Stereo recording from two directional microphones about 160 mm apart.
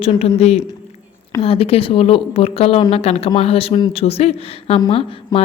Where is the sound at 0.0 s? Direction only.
40° left (ahead or behind).